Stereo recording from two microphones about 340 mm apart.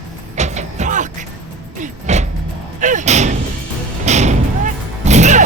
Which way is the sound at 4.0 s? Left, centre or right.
Centre.